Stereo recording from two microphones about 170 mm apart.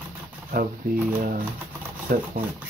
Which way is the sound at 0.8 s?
60° right (ahead or behind).